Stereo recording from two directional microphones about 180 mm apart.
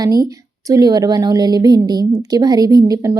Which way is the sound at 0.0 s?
20° right (ahead or behind).